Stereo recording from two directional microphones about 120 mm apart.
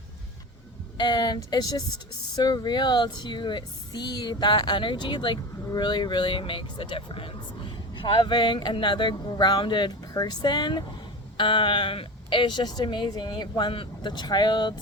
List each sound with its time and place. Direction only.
0.9 s speech: 40° left (ahead or behind)